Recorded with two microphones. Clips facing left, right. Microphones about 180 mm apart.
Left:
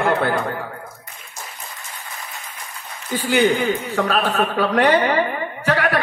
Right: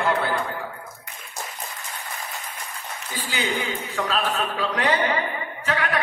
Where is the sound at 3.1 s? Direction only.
60° left (ahead or behind).